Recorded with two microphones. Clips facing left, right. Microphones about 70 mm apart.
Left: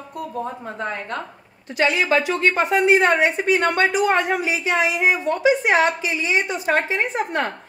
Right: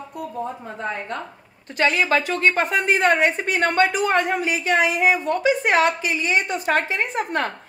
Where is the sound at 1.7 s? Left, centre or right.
Right.